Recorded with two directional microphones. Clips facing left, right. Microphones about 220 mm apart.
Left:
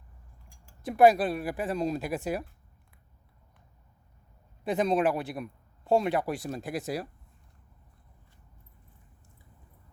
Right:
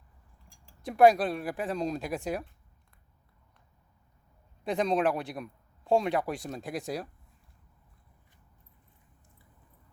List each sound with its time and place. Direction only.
0.4 s speech: centre (ahead or behind)
4.6 s speech: 5° left (ahead or behind)